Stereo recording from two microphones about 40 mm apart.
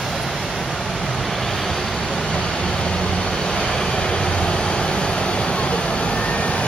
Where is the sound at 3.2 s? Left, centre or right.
Centre.